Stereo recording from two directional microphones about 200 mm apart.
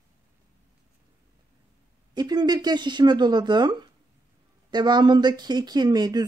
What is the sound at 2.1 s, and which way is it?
Speech, 20° right (ahead or behind).